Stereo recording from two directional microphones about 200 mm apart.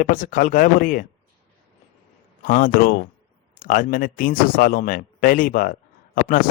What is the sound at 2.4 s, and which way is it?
A man's voice, 45° left (ahead or behind).